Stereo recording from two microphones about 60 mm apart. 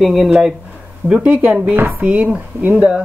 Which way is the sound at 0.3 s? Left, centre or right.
Centre.